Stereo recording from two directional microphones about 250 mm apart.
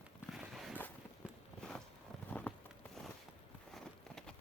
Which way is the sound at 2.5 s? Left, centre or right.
Centre.